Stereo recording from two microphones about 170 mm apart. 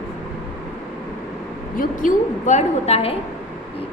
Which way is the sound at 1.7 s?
45° left (ahead or behind).